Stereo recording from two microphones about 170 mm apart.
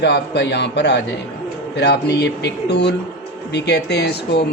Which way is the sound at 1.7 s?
75° left (ahead or behind).